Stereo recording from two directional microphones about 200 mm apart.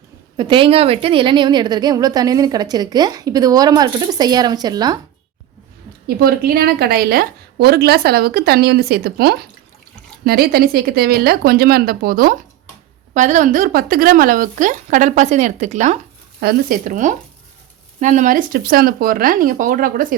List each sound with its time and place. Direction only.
0.3 s a woman's voice: 25° right (ahead or behind)
6.1 s a woman's voice: 50° right (ahead or behind)
13.1 s speech: 35° right (ahead or behind)
16.4 s a woman's voice: 50° right (ahead or behind)